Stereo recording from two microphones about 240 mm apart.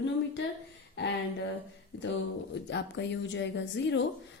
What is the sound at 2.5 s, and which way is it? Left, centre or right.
Speech, left.